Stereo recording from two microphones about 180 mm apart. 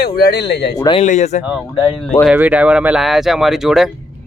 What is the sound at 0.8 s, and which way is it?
Speech, 25° left (ahead or behind).